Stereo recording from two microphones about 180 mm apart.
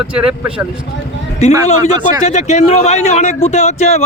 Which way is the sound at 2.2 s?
40° left (ahead or behind).